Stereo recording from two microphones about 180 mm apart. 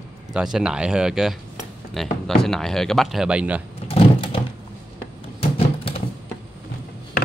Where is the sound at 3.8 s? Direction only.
30° left (ahead or behind).